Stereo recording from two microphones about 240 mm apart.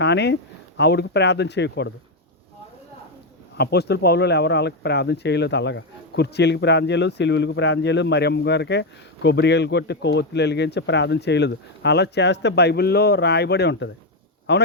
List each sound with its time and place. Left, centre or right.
0.0 s speech: left
3.6 s speech: left